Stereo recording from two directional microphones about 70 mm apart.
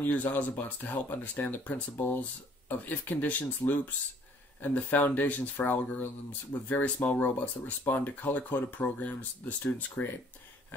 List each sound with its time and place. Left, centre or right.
0.0 s speech: left